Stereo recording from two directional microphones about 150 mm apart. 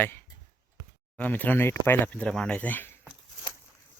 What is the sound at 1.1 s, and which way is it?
Speech, 10° left (ahead or behind).